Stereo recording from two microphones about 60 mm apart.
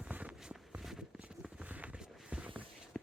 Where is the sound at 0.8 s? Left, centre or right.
Centre.